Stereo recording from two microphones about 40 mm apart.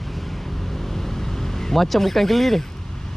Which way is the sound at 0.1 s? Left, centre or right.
Centre.